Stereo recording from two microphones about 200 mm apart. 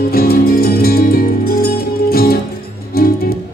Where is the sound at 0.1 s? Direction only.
50° left (ahead or behind).